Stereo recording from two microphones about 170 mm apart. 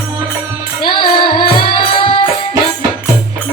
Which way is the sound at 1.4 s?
30° left (ahead or behind).